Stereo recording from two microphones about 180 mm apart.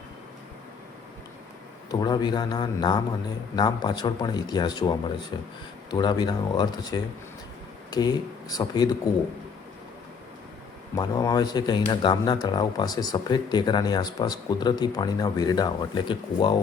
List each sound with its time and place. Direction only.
1.9 s speech: 20° left (ahead or behind)
10.9 s speech: 20° left (ahead or behind)